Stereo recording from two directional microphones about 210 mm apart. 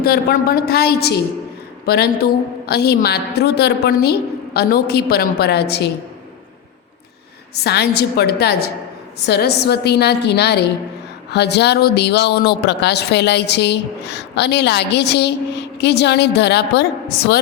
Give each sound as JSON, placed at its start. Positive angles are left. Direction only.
{"t": 0.0, "sound": "a woman's voice", "side_deg": 45}
{"t": 7.6, "sound": "speech", "side_deg": 50}